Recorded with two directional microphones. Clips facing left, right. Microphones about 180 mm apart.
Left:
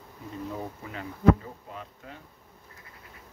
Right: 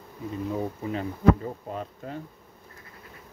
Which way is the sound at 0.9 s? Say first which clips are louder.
Even; 40° right (ahead or behind).